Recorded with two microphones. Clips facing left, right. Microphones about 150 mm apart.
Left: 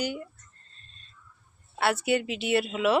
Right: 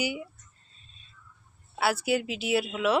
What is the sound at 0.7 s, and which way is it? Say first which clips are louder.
Music: left 1 dB; 5° right (ahead or behind).